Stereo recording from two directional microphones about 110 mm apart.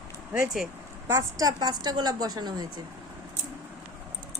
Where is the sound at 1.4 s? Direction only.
35° right (ahead or behind).